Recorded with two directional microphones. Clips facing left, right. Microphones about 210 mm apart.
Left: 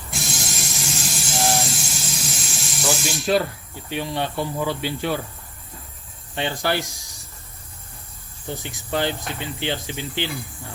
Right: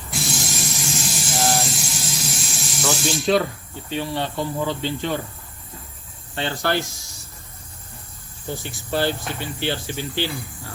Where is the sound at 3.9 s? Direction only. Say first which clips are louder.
Even; 15° left (ahead or behind).